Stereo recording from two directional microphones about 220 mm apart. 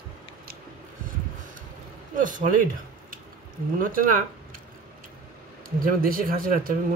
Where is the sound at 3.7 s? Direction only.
40° right (ahead or behind).